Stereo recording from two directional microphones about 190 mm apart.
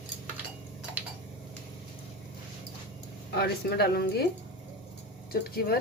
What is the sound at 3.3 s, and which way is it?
Speech, 55° left (ahead or behind).